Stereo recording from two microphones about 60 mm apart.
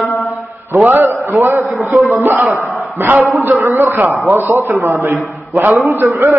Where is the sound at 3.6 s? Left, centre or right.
Right.